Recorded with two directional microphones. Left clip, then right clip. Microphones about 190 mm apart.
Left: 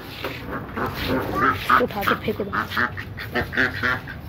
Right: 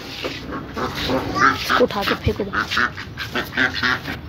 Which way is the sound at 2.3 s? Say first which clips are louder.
Right 2 dB; 5° right (ahead or behind).